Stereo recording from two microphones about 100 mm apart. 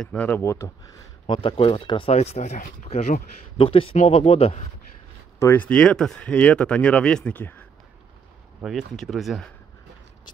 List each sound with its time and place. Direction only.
0.0 s speech: 10° left (ahead or behind)
0.3 s speech: 30° left (ahead or behind)
1.2 s speech: 45° left (ahead or behind)
2.0 s speech: 90° left
3.5 s speech: 65° left (ahead or behind)
5.4 s speech: 20° left (ahead or behind)
8.6 s speech: centre (ahead or behind)